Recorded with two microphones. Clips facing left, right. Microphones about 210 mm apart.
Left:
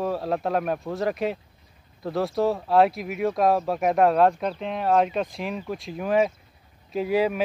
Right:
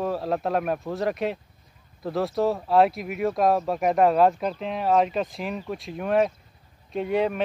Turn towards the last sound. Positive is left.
turn(degrees=5)  # may be behind; listen again after turning